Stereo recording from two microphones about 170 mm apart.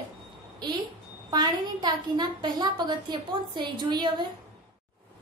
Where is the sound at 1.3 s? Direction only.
25° right (ahead or behind).